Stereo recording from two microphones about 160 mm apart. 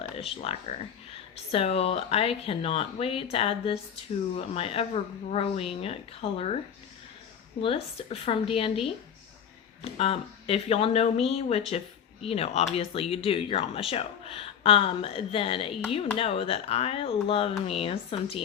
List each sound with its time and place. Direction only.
0.2 s speech: 35° left (ahead or behind)
7.6 s speech: 35° left (ahead or behind)